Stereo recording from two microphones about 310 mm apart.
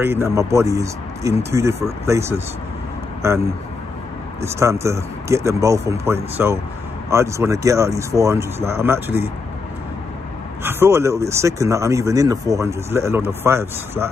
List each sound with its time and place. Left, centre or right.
0.0 s speech: centre
4.5 s speech: centre
10.6 s speech: centre